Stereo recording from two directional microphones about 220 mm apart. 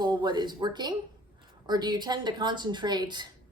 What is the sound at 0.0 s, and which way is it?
Speech, 20° right (ahead or behind).